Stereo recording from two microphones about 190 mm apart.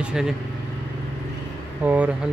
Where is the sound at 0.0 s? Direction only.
5° right (ahead or behind).